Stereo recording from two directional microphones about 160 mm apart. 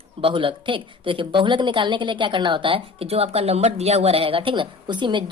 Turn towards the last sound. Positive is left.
turn(degrees=-30)  # may be behind; listen again after turning